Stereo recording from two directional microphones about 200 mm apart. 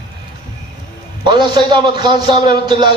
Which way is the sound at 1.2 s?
25° right (ahead or behind).